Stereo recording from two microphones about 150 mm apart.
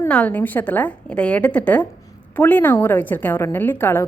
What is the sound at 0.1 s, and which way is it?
A woman's voice, 10° left (ahead or behind).